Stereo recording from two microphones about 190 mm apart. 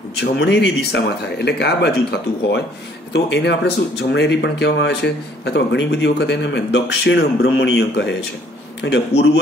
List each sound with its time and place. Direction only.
0.2 s speech: 65° left (ahead or behind)